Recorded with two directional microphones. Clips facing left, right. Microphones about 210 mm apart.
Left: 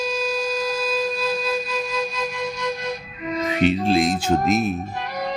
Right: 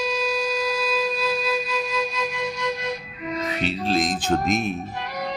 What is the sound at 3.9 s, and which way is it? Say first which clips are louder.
Speech: left 3 dB; 10° left (ahead or behind).